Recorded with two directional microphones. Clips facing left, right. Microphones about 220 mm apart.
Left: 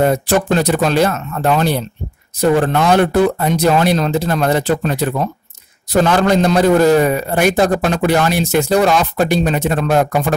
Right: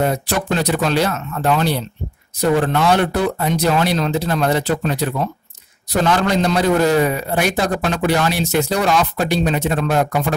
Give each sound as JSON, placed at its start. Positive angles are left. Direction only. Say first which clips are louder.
{"t": 0.3, "sound": "a man's voice", "louder": "left 5 dB", "side_deg": 45}
{"t": 6.0, "sound": "a man's voice", "louder": "left 2 dB", "side_deg": 45}